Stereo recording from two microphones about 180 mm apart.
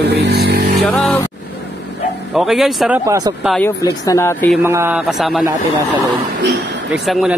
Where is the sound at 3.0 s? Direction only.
20° right (ahead or behind).